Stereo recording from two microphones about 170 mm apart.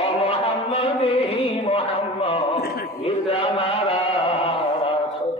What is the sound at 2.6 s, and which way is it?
Speech, 65° left (ahead or behind).